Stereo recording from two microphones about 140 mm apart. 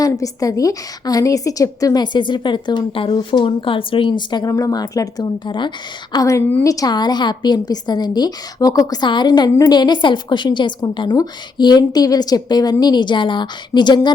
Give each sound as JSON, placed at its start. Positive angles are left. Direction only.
{"t": 0.0, "sound": "a woman's voice", "side_deg": 25}
{"t": 6.1, "sound": "a woman's voice", "side_deg": 20}